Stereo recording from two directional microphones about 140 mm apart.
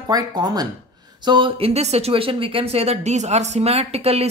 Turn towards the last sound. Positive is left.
turn(degrees=-45)  # may be behind; listen again after turning